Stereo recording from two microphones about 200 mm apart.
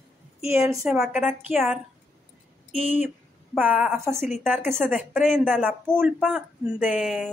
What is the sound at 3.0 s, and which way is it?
Speech, 5° right (ahead or behind).